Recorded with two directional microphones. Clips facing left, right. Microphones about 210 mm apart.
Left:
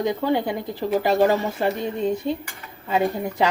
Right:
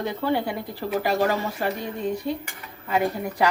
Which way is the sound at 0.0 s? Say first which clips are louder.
Left 3 dB; 15° left (ahead or behind).